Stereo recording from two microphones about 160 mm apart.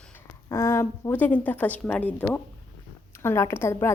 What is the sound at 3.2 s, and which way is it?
Speech, 15° left (ahead or behind).